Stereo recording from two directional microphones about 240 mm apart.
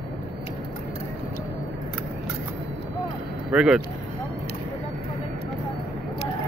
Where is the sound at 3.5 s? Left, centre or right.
Centre.